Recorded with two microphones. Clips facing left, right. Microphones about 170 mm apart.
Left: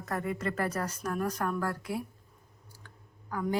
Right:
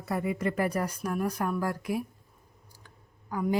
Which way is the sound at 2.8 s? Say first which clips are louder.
Left 1 dB; 15° right (ahead or behind).